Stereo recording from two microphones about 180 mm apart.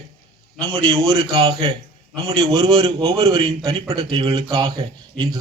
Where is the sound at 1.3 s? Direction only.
20° right (ahead or behind).